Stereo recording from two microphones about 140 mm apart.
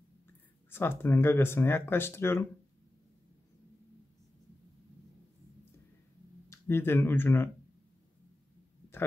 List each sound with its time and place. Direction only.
0.7 s speech: 15° left (ahead or behind)
6.5 s speech: 15° left (ahead or behind)